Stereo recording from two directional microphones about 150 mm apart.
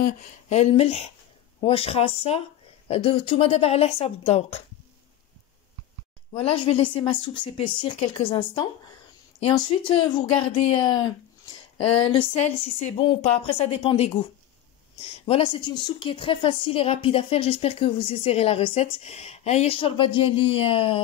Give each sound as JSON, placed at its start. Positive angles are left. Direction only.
{"t": 0.5, "sound": "a woman's voice", "side_deg": 45}
{"t": 6.3, "sound": "speech", "side_deg": 35}